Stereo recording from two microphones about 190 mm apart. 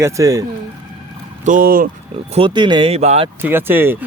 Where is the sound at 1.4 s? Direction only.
45° right (ahead or behind).